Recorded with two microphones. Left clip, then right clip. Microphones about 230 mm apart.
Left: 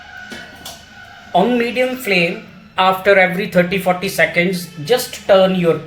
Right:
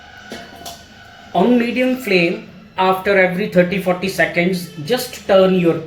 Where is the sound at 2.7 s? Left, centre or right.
Left.